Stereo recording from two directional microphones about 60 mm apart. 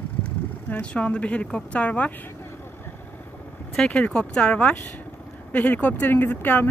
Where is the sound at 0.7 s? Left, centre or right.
Left.